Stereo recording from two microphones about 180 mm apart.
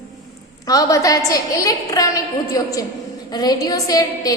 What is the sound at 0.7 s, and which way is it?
A woman's voice, 20° left (ahead or behind).